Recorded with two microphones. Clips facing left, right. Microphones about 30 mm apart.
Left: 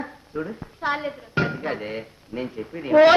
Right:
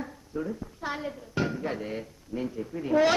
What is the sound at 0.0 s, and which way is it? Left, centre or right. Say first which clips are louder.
Speech: left 3 dB; left.